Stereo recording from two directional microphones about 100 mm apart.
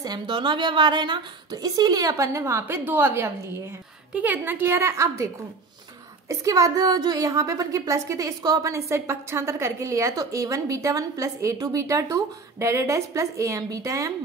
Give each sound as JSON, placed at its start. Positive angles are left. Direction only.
{"t": 0.0, "sound": "a woman's voice", "side_deg": -45}